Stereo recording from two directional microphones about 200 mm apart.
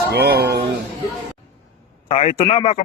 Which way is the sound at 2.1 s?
30° left (ahead or behind).